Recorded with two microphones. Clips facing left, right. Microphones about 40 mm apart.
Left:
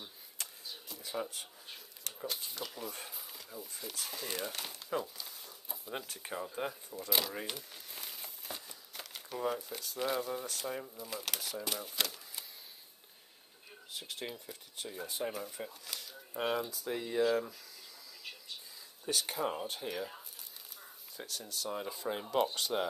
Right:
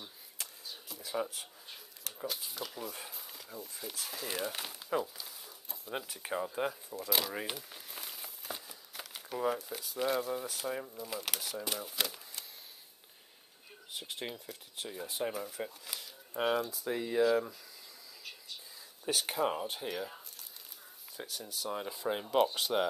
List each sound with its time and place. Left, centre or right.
0.0 s speech: centre
13.9 s speech: centre
15.6 s a sound: centre
16.7 s speech: centre
19.1 s speech: right
19.6 s speech: centre
21.2 s speech: centre